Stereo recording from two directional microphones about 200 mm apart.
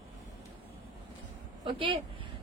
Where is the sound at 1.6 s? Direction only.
25° right (ahead or behind).